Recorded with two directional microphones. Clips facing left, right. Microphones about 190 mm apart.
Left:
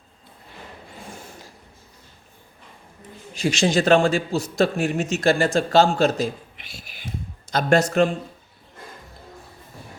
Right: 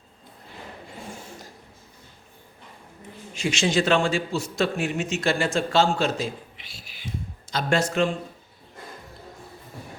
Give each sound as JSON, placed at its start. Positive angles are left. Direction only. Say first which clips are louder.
{"t": 3.3, "sound": "a man's voice", "louder": "left 3 dB", "side_deg": 35}